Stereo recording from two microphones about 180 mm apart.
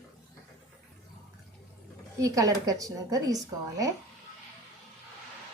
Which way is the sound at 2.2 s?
20° right (ahead or behind).